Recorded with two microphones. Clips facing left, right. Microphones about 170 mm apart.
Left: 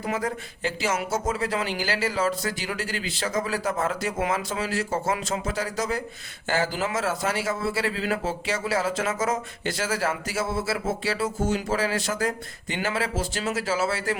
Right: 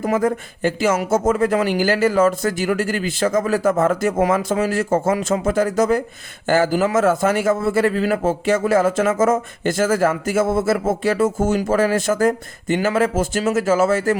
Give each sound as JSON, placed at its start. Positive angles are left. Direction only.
{"t": 0.0, "sound": "a man's voice", "side_deg": -50}